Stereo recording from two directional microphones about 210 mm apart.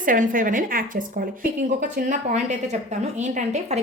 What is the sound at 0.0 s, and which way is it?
Speech, 40° right (ahead or behind).